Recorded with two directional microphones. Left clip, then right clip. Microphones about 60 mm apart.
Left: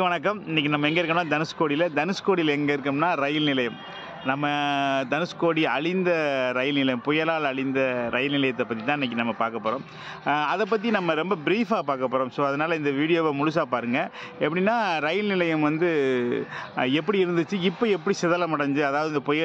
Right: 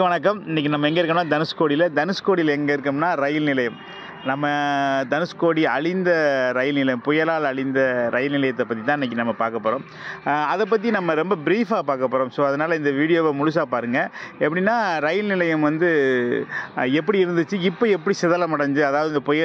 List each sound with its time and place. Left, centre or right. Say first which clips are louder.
0.0 s speech: right 5 dB; right
2.0 s speech: right 4 dB; right
2.6 s a man's voice: right 3 dB; centre; by 8.6 s right
8.8 s a man's voice: right 4 dB; right
10.2 s a man's voice: right 3 dB; right
11.6 s speech: right 4 dB; right
17.7 s a man's voice: right 5 dB; right